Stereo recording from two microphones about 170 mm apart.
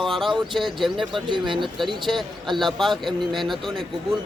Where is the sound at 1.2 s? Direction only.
30° right (ahead or behind).